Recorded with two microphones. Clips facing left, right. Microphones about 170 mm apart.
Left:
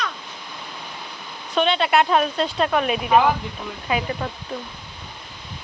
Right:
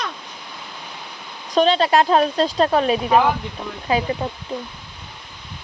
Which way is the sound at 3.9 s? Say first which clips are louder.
Right 4 dB; 20° right (ahead or behind).